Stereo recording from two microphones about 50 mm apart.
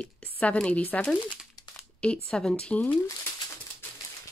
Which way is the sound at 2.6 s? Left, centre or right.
Left.